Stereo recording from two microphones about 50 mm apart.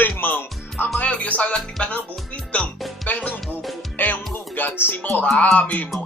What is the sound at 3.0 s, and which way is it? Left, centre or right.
Music, left.